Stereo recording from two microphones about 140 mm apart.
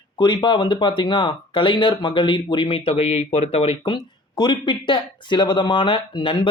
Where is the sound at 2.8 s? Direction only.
50° left (ahead or behind).